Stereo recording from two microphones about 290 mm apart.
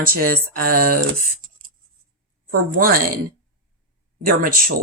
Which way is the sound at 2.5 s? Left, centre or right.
Right.